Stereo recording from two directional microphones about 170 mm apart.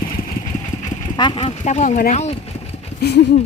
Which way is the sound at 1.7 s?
45° left (ahead or behind).